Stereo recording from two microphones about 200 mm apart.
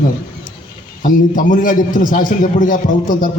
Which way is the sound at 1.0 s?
40° left (ahead or behind).